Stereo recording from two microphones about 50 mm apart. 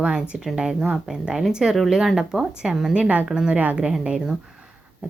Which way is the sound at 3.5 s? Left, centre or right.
Right.